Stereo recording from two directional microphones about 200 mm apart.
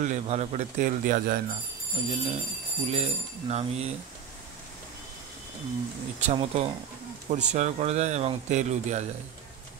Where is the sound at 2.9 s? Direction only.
30° right (ahead or behind).